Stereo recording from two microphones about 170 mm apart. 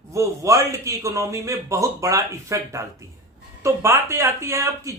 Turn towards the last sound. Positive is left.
turn(degrees=-15)  # may be behind; listen again after turning